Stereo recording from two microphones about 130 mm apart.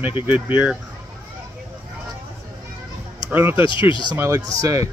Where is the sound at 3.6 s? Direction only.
40° left (ahead or behind).